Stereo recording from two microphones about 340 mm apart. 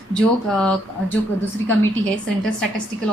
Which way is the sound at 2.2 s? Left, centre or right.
Centre.